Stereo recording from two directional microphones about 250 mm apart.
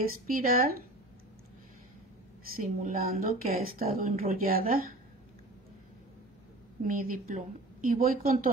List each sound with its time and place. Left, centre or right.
0.0 s a woman's voice: right
2.5 s a woman's voice: right
6.8 s a woman's voice: right